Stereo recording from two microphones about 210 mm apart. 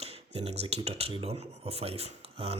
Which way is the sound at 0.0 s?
30° right (ahead or behind).